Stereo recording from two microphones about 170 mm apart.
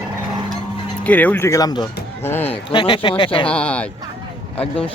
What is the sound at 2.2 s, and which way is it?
Speech, 10° left (ahead or behind).